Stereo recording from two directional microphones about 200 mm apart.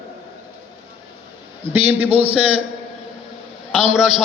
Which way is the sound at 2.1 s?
30° right (ahead or behind).